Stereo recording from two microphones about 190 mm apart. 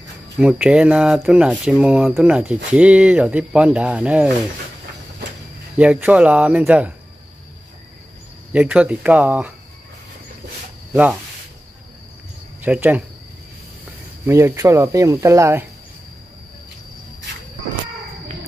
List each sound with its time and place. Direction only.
0.4 s speech: 5° right (ahead or behind)
5.8 s speech: 5° right (ahead or behind)
8.5 s speech: 5° right (ahead or behind)
10.9 s speech: 10° right (ahead or behind)
12.6 s speech: 10° right (ahead or behind)
14.2 s speech: 15° right (ahead or behind)